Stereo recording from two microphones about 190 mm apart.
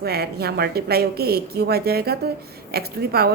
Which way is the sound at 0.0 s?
55° right (ahead or behind).